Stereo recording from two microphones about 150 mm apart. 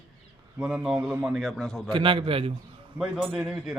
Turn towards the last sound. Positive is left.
turn(degrees=0)  # may be behind; listen again after turning